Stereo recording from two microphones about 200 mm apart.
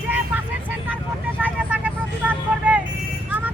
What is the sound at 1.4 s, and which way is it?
Vehicle, 5° right (ahead or behind).